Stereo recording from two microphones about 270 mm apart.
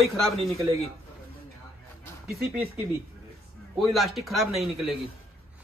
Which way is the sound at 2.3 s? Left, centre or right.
Centre.